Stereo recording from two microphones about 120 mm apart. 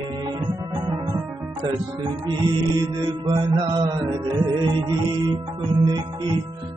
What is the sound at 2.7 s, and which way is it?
Music, 40° right (ahead or behind).